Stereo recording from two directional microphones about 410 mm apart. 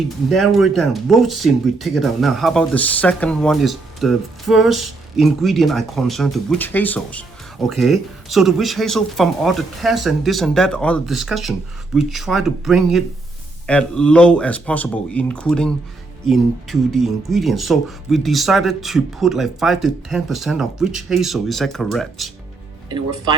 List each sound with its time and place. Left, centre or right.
0.3 s speech: centre
22.9 s speech: centre